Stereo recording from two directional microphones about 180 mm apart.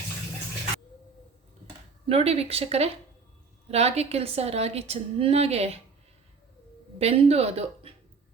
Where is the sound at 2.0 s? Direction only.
35° right (ahead or behind).